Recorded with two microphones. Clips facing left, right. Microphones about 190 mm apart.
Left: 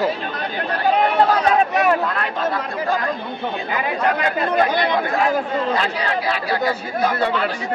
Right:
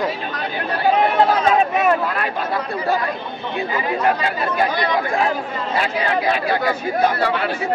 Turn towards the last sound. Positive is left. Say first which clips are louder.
# right 2 dB
turn(degrees=-15)  # may be behind; listen again after turning